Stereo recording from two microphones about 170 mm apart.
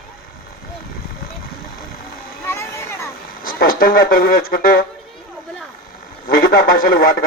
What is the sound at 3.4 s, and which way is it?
Speech, 55° left (ahead or behind).